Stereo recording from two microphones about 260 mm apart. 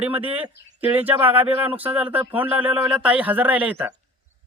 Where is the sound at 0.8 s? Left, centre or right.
Centre.